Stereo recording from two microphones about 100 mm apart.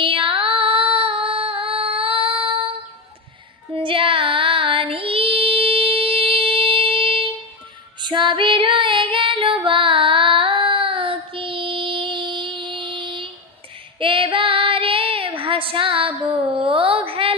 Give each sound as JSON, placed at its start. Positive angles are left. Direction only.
{"t": 0.0, "sound": "female singing", "side_deg": -65}
{"t": 3.7, "sound": "child singing", "side_deg": -60}
{"t": 8.0, "sound": "female singing", "side_deg": -50}
{"t": 13.9, "sound": "child singing", "side_deg": -60}
{"t": 16.5, "sound": "a sound", "side_deg": -65}